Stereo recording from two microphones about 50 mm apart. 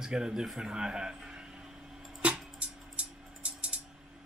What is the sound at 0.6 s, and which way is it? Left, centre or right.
Speech, centre.